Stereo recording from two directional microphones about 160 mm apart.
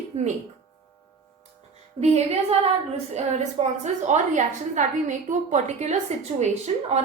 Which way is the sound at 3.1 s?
45° right (ahead or behind).